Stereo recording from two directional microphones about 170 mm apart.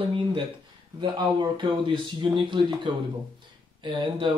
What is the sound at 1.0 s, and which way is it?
Speech, 25° right (ahead or behind).